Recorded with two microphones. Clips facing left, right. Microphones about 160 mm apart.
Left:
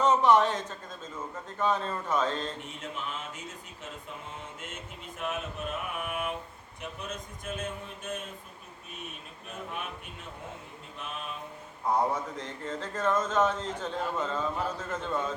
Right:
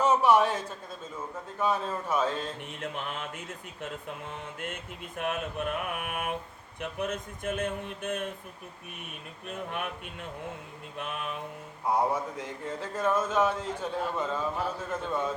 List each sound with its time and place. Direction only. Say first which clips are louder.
0.0 s a man's voice: even; 10° right (ahead or behind)
2.8 s mantra: right 3 dB; 60° right (ahead or behind)
4.6 s mantra: right 4 dB; 60° right (ahead or behind)
10.9 s mantra: right 4 dB; 60° right (ahead or behind)
11.9 s speech: right 1 dB; 10° right (ahead or behind)